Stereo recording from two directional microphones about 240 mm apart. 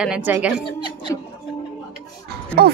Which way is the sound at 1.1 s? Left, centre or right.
Centre.